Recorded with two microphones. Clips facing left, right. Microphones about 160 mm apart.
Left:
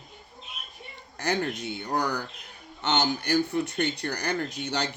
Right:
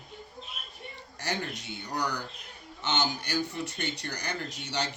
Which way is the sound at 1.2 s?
60° left (ahead or behind).